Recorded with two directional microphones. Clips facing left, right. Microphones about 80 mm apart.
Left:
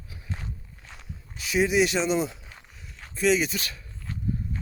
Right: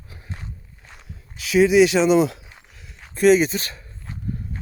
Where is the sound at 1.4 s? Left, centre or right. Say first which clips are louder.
Right 8 dB; right.